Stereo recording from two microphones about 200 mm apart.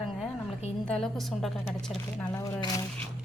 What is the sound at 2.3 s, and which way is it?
Speech, 15° left (ahead or behind).